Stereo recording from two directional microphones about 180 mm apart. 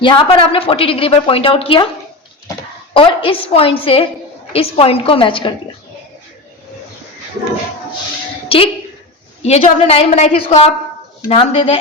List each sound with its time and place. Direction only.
0.0 s a woman's voice: 30° left (ahead or behind)
2.9 s a woman's voice: 30° left (ahead or behind)
8.4 s a woman's voice: 30° left (ahead or behind)